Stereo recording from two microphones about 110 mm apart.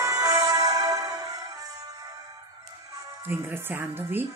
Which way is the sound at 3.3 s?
20° right (ahead or behind).